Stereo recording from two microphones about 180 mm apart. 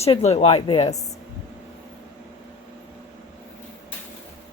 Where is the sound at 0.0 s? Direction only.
35° left (ahead or behind).